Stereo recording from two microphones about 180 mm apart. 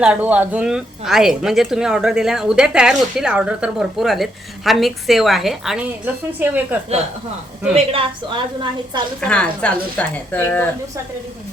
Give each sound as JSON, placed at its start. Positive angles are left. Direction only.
{"t": 0.0, "sound": "a woman's voice", "side_deg": -5}
{"t": 7.7, "sound": "a woman's voice", "side_deg": -30}
{"t": 9.2, "sound": "a woman's voice", "side_deg": 5}